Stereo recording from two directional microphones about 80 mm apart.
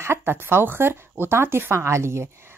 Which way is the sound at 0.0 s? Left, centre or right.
Right.